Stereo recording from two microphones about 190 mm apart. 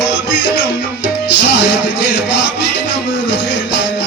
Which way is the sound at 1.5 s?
60° left (ahead or behind).